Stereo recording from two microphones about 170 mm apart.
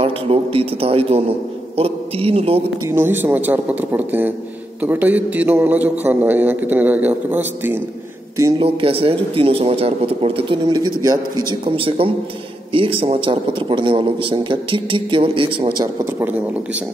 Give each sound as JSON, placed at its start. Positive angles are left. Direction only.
{"t": 0.0, "sound": "a man's voice", "side_deg": -35}
{"t": 2.9, "sound": "a man's voice", "side_deg": -10}
{"t": 8.5, "sound": "a man's voice", "side_deg": -35}
{"t": 16.2, "sound": "a man's voice", "side_deg": -10}